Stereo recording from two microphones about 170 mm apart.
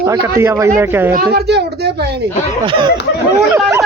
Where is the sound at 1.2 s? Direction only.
70° right (ahead or behind).